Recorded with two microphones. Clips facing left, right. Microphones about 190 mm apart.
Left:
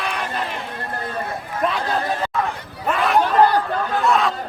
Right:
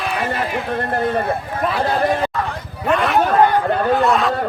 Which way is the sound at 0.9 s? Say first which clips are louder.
Right 10 dB; 70° right (ahead or behind).